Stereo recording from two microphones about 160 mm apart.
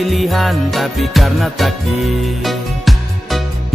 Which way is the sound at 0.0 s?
Centre (ahead or behind).